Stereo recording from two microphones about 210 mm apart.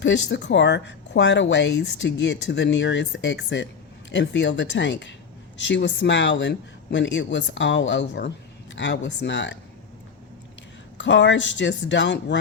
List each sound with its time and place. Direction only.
0.0 s speech: 55° left (ahead or behind)
10.9 s speech: 60° left (ahead or behind)